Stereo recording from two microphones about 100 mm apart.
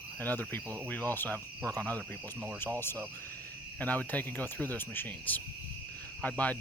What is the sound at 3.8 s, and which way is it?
Speech, 15° left (ahead or behind).